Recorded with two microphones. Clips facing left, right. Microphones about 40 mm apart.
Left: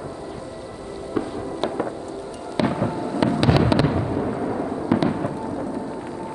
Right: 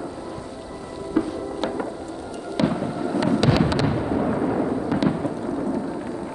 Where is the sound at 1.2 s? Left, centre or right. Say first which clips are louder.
Right 2 dB; centre.